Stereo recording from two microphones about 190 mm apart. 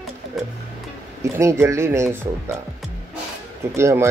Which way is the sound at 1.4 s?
15° right (ahead or behind).